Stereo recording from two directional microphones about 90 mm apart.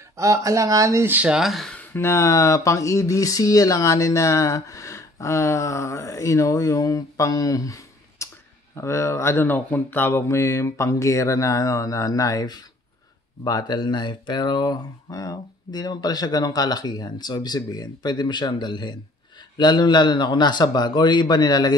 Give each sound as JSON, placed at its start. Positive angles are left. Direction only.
{"t": 0.2, "sound": "speech", "side_deg": -35}
{"t": 1.0, "sound": "speech", "side_deg": -20}
{"t": 1.3, "sound": "speech", "side_deg": 0}
{"t": 2.0, "sound": "speech", "side_deg": 30}